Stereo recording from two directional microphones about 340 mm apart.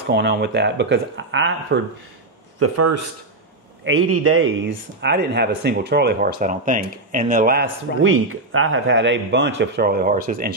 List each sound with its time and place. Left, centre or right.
0.1 s a man's voice: right
2.6 s a man's voice: right
5.0 s speech: right
8.0 s a man's voice: right